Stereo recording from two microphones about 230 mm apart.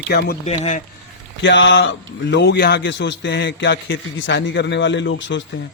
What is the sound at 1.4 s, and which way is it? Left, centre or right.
A man's voice, left.